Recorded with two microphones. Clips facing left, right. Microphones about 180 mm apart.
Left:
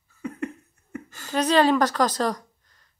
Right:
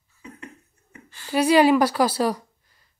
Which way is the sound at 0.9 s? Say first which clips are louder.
Left 8 dB; 45° left (ahead or behind).